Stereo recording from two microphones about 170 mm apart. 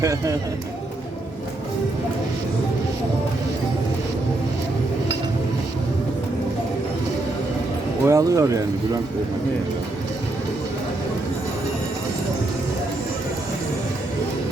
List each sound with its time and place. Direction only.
8.0 s speech: 20° right (ahead or behind)